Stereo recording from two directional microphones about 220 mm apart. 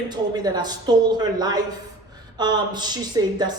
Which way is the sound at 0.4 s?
20° right (ahead or behind).